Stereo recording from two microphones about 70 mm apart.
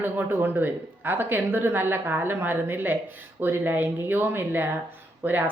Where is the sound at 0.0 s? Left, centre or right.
Right.